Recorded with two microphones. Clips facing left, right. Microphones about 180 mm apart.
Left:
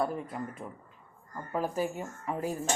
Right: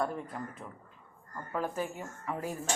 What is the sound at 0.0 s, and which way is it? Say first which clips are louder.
Speech: left 2 dB; 10° left (ahead or behind).